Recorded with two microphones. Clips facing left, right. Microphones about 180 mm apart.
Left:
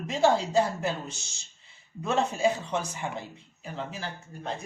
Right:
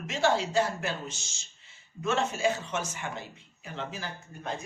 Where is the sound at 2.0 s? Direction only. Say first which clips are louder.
Left 2 dB; 35° left (ahead or behind).